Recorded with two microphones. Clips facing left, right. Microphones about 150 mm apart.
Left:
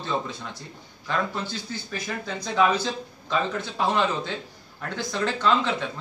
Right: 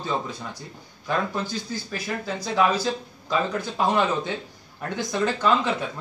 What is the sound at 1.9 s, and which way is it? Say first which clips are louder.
Speech: right 1 dB; 5° right (ahead or behind).